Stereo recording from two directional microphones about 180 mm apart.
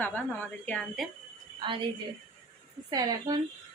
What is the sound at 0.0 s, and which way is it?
A woman's voice, 10° left (ahead or behind).